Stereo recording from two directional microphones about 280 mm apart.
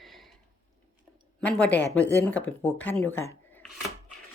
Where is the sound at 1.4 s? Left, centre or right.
Centre.